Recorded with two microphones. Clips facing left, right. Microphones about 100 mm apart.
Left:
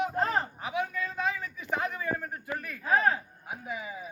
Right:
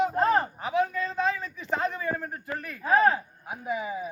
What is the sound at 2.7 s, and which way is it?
Speech, 5° right (ahead or behind).